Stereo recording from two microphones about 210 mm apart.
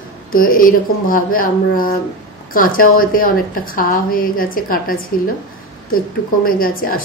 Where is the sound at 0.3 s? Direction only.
40° left (ahead or behind).